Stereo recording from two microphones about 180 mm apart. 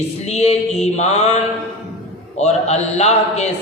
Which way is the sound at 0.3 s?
35° left (ahead or behind).